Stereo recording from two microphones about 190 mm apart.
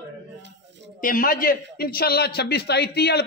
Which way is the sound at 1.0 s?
45° left (ahead or behind).